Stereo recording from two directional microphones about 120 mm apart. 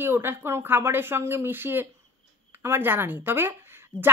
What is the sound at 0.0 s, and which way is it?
Speech, 20° right (ahead or behind).